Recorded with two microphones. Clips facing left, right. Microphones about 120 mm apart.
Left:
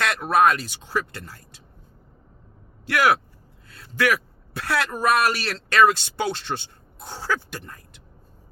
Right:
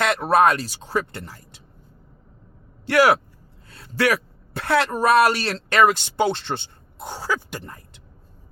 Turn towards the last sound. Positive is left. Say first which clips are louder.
# right 1 dB
turn(degrees=-15)  # may be behind; listen again after turning